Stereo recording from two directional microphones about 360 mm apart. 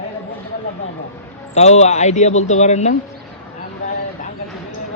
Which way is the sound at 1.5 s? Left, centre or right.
Centre.